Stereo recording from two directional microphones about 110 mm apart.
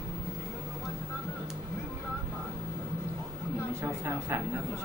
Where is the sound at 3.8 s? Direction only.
20° right (ahead or behind).